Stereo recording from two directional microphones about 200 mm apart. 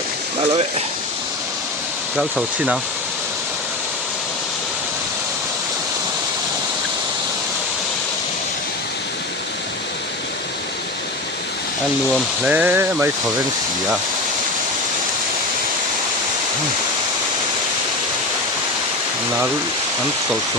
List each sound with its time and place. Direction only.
2.1 s speech: 5° right (ahead or behind)
12.1 s speech: 5° right (ahead or behind)